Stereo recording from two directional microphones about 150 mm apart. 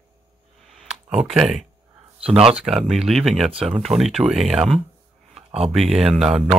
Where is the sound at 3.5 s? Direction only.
40° right (ahead or behind).